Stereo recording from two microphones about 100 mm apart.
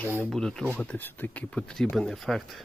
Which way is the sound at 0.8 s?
15° left (ahead or behind).